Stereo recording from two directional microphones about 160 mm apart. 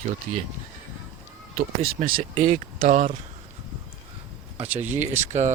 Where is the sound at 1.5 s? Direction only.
65° right (ahead or behind).